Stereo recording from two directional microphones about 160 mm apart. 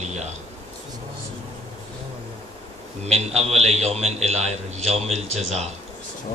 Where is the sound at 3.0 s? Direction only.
40° right (ahead or behind).